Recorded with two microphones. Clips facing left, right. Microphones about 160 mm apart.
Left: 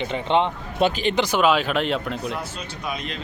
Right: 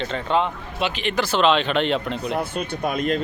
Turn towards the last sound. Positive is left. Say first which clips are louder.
# right 8 dB
turn(degrees=-50)  # may be behind; listen again after turning